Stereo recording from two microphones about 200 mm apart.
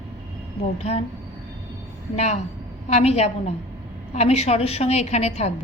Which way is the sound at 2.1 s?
35° left (ahead or behind).